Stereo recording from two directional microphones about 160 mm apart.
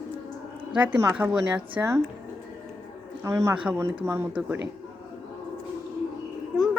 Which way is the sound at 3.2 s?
20° right (ahead or behind).